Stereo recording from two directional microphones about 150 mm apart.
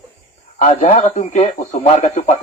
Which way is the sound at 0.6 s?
55° left (ahead or behind).